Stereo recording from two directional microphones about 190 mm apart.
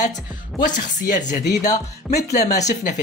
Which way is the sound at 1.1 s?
40° left (ahead or behind).